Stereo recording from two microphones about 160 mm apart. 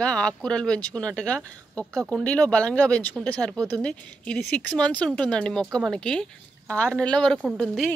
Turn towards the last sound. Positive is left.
turn(degrees=-5)  # may be behind; listen again after turning